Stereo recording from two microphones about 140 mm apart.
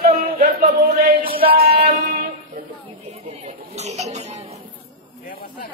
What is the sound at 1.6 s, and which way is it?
Music, 90° right.